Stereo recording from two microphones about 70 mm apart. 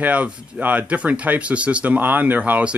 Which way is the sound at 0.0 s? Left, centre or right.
Right.